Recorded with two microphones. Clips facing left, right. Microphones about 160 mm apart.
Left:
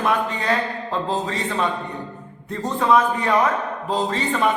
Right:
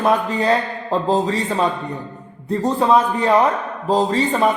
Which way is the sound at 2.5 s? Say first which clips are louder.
Right 3 dB; 35° right (ahead or behind).